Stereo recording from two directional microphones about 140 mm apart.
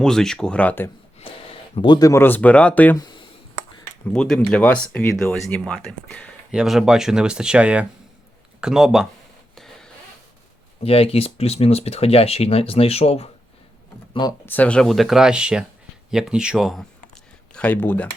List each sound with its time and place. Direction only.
0.0 s speech: 5° left (ahead or behind)
1.7 s speech: 35° left (ahead or behind); by 3.0 s 10° left (ahead or behind)
4.0 s speech: 5° left (ahead or behind)
6.5 s speech: 5° right (ahead or behind)
9.6 s a sound: 5° left (ahead or behind)
10.8 s speech: 45° left (ahead or behind)
14.1 s speech: 30° left (ahead or behind)
14.4 s speech: 10° left (ahead or behind)
17.5 s speech: 10° left (ahead or behind)